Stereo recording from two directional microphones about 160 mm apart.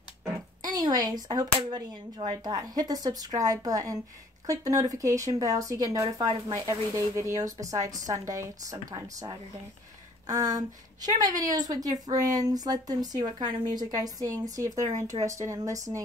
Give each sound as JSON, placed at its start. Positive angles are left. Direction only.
{"t": 0.6, "sound": "speech", "side_deg": -25}